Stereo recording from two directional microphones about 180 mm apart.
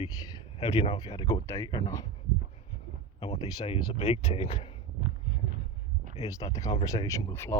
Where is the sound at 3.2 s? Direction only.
30° left (ahead or behind).